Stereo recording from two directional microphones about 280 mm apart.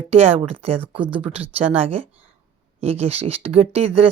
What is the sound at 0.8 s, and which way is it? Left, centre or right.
Speech, centre.